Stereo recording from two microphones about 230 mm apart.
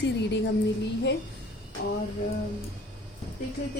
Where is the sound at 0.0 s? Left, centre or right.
Left.